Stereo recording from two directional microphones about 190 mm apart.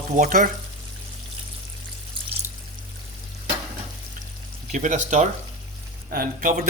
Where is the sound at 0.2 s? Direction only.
50° right (ahead or behind).